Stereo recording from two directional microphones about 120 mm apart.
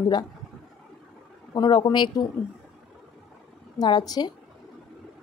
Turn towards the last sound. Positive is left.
turn(degrees=35)  # may be behind; listen again after turning